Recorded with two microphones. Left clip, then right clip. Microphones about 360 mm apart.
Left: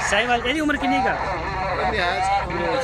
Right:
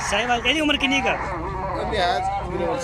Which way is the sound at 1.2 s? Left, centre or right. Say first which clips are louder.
Left 3 dB; left.